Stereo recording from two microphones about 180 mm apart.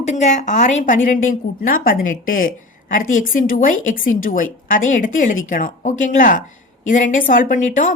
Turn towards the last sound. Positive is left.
turn(degrees=45)  # may be behind; listen again after turning